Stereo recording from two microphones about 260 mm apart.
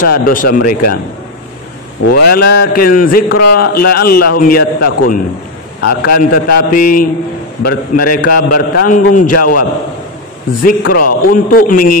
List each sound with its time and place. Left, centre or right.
0.0 s a man's voice: left
2.1 s a man's voice: left
10.8 s a man's voice: left